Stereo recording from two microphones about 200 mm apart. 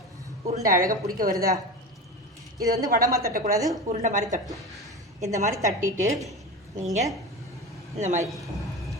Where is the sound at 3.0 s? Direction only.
15° right (ahead or behind).